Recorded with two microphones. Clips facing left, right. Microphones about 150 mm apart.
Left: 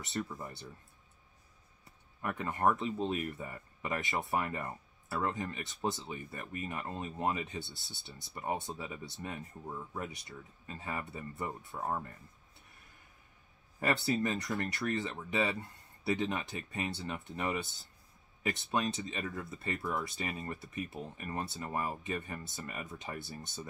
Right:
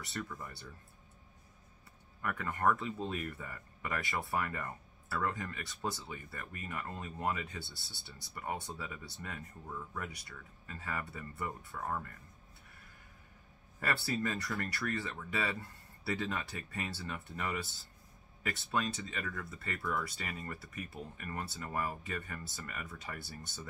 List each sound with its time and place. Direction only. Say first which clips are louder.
0.0 s speech: left 4 dB; 20° left (ahead or behind)
2.2 s speech: left 2 dB; 25° left (ahead or behind)
13.7 s speech: left 4 dB; 20° left (ahead or behind)